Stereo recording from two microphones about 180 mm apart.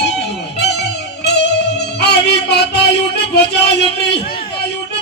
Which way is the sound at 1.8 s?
65° left (ahead or behind).